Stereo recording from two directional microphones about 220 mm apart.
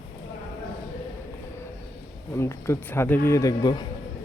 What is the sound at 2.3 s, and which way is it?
A man's voice, 10° left (ahead or behind).